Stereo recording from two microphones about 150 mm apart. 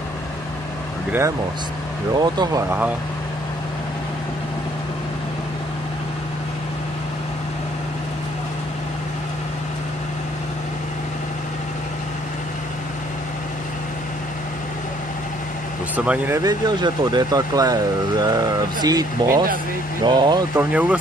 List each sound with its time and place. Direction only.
2.1 s speech: 30° right (ahead or behind)
16.0 s speech: 10° right (ahead or behind)
16.3 s speech: 25° right (ahead or behind)
20.5 s speech: 10° right (ahead or behind)